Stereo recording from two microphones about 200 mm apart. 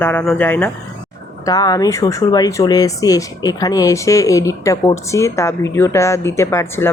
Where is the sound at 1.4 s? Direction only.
20° left (ahead or behind).